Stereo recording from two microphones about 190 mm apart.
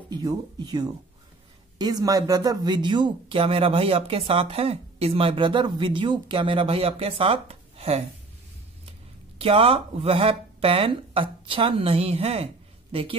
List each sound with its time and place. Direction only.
0.1 s speech: 20° right (ahead or behind)
9.4 s speech: 30° right (ahead or behind)